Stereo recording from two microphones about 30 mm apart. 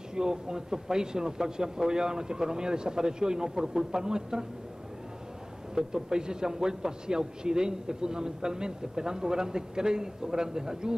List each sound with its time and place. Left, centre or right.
0.1 s a man's voice: right
5.8 s a man's voice: right